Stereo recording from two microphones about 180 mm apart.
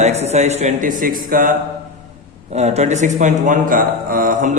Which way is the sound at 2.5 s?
40° right (ahead or behind).